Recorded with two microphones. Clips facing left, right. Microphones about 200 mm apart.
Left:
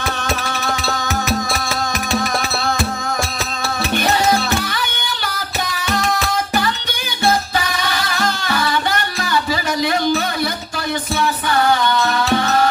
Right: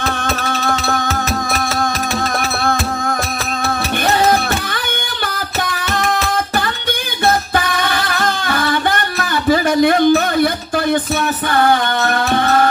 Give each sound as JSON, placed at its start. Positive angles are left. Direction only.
{"t": 0.6, "sound": "music", "side_deg": -55}
{"t": 1.3, "sound": "a sound", "side_deg": -55}
{"t": 7.5, "sound": "music", "side_deg": -55}